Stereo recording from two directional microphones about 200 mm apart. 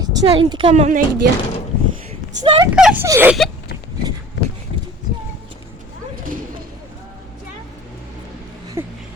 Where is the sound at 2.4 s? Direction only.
25° right (ahead or behind).